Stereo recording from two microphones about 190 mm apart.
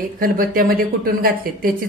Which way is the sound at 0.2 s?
50° right (ahead or behind).